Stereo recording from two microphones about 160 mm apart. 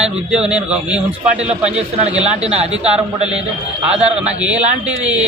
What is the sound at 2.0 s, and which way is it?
Speech, 45° right (ahead or behind).